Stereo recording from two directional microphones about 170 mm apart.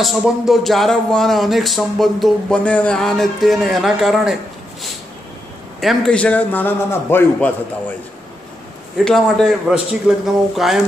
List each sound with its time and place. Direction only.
0.0 s speech: centre (ahead or behind)
5.8 s a man's voice: 5° left (ahead or behind)
8.9 s speech: centre (ahead or behind)